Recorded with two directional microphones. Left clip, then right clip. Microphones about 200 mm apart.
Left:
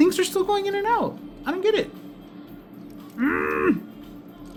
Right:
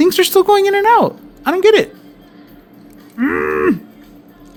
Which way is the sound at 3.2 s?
35° right (ahead or behind).